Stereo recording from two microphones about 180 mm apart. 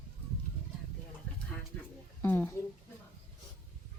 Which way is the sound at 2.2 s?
10° left (ahead or behind).